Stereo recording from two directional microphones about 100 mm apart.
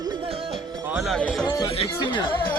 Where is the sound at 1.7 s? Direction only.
60° left (ahead or behind).